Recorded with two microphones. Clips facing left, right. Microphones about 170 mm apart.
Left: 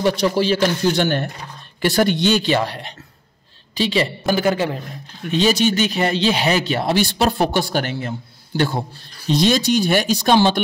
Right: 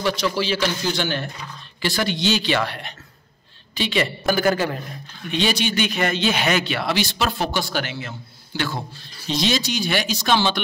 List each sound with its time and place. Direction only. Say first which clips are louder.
0.0 s a man's voice: left 5 dB; 55° left (ahead or behind); by 4.1 s 35° left (ahead or behind)
4.3 s a man's voice: left 1 dB; 25° left (ahead or behind)
5.3 s a man's voice: left 5 dB; 40° left (ahead or behind)